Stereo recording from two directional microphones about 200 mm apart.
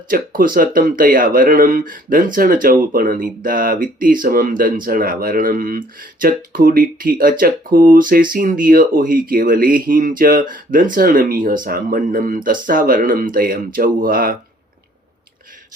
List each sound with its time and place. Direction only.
0.1 s speech: 45° right (ahead or behind)